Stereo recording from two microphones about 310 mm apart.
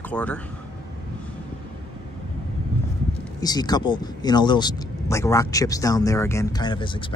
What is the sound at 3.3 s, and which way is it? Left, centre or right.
Speech, centre.